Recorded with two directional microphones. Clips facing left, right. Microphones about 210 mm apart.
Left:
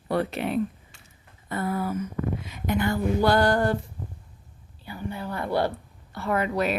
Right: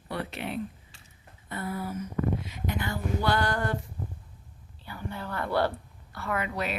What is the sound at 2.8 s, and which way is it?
Speech, 45° left (ahead or behind).